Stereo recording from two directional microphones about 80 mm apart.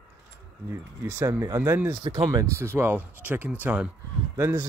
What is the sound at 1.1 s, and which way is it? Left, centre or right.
Speech, right.